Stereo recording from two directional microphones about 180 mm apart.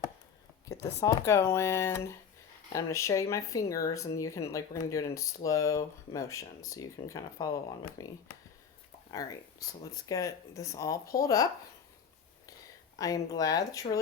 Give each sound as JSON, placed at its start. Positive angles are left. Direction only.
{"t": 0.7, "sound": "speech", "side_deg": 15}
{"t": 13.0, "sound": "speech", "side_deg": 20}